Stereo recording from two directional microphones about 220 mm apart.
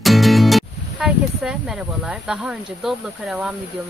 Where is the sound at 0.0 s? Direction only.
Centre (ahead or behind).